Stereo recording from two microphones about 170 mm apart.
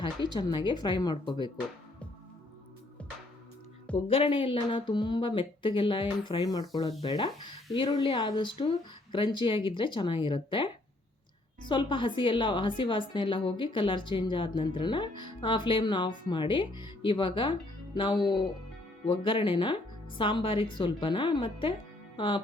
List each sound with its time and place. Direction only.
0.0 s a woman's voice: 25° left (ahead or behind)
3.9 s a woman's voice: 30° left (ahead or behind)
11.7 s a woman's voice: 30° left (ahead or behind)